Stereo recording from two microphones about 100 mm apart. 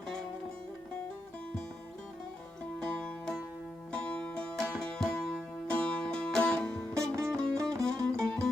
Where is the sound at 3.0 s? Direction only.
5° left (ahead or behind).